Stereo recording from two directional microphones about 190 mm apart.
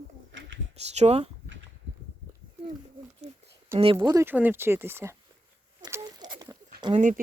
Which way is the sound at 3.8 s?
25° right (ahead or behind).